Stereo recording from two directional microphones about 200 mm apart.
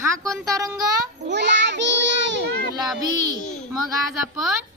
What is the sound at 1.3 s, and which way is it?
Child singing, 60° right (ahead or behind).